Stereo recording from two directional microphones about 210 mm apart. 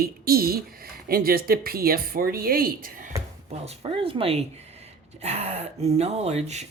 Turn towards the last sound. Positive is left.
turn(degrees=-30)  # may be behind; listen again after turning